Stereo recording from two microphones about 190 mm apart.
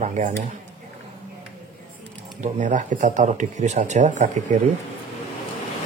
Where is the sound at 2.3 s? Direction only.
40° right (ahead or behind).